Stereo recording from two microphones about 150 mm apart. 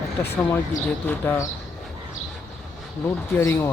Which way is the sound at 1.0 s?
10° left (ahead or behind).